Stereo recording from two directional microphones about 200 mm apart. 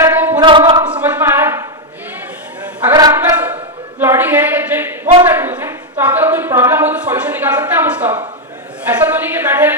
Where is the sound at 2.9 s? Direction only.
15° right (ahead or behind).